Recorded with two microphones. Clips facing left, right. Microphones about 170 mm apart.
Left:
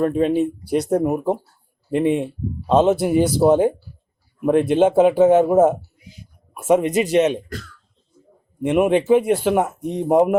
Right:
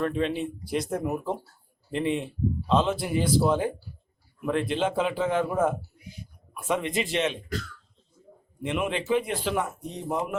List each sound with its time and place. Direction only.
0.0 s speech: 45° left (ahead or behind)
8.6 s speech: 50° left (ahead or behind)